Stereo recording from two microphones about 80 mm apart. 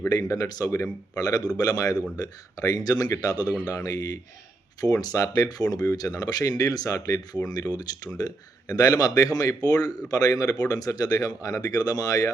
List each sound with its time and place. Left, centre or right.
0.1 s speech: left
7.4 s speech: left